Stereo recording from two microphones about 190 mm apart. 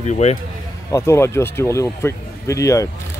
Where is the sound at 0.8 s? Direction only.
15° left (ahead or behind).